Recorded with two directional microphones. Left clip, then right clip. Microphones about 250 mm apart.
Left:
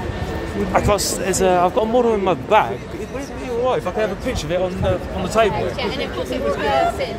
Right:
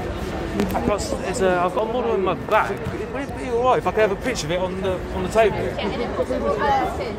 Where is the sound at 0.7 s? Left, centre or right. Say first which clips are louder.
Left 8 dB; left.